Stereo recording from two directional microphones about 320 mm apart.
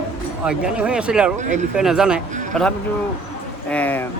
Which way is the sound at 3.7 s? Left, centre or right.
Centre.